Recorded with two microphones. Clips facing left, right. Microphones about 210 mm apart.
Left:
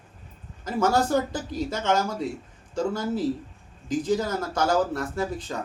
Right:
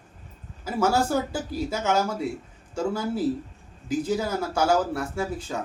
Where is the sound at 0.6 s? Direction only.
5° right (ahead or behind).